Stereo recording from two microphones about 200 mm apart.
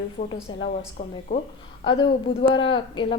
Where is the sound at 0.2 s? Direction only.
40° left (ahead or behind).